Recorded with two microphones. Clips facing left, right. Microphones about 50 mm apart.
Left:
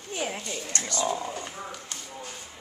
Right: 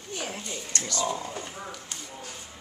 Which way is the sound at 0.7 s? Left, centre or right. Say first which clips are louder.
Left 1 dB; centre.